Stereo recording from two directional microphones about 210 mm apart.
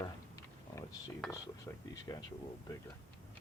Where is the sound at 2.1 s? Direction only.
15° left (ahead or behind).